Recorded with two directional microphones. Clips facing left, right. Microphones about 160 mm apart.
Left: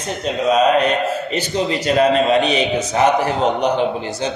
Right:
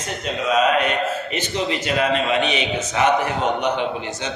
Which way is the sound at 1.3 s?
35° left (ahead or behind).